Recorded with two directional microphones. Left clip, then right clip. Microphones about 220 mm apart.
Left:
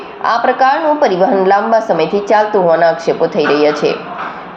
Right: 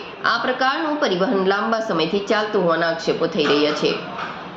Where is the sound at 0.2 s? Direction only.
10° left (ahead or behind).